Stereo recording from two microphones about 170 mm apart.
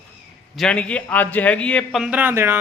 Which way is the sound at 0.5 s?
5° left (ahead or behind).